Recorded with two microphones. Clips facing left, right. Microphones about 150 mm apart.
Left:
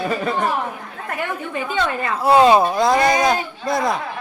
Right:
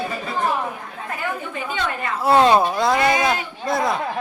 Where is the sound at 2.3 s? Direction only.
5° left (ahead or behind).